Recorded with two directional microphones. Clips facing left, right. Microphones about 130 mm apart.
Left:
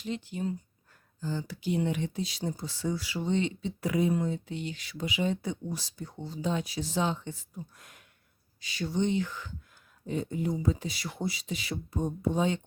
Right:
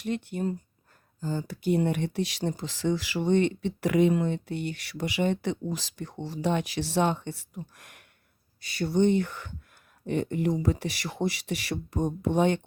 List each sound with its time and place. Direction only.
0.0 s speech: 60° right (ahead or behind); by 8.0 s 75° right (ahead or behind)
8.8 s speech: 60° right (ahead or behind)
10.1 s speech: 75° right (ahead or behind)